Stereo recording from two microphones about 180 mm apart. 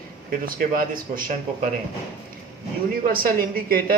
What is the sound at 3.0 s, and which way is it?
Speech, 50° right (ahead or behind).